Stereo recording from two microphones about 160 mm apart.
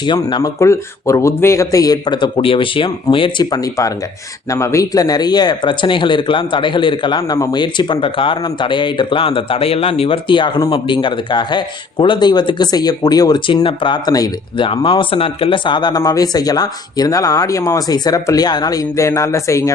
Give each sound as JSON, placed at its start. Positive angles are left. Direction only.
{"t": 0.0, "sound": "speech", "side_deg": 30}